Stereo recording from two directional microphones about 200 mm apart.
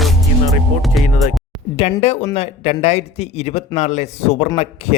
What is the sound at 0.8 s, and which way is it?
Music, centre (ahead or behind).